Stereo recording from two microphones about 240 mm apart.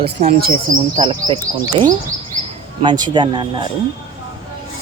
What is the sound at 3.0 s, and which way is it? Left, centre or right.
Speech, centre.